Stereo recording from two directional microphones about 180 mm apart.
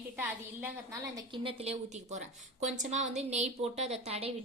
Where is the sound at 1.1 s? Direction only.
30° right (ahead or behind).